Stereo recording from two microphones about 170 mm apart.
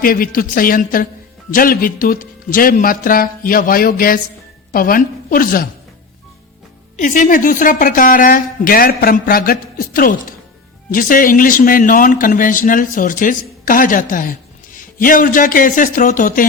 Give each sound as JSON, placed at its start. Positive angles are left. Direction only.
{"t": 0.0, "sound": "speech", "side_deg": 55}
{"t": 6.9, "sound": "a man's voice", "side_deg": 50}